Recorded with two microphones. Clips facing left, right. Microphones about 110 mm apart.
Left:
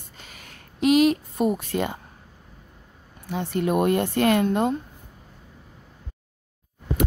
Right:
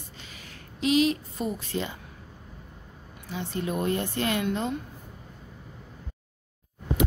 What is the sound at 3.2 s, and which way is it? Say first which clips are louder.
A woman's voice: left 7 dB; 55° left (ahead or behind).